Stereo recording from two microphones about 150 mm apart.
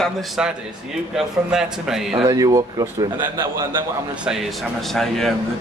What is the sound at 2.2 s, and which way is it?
A man's voice, 25° right (ahead or behind).